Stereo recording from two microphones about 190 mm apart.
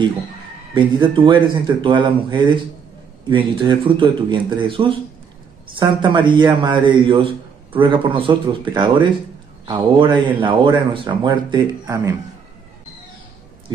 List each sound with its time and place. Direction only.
1.1 s speech: 25° right (ahead or behind)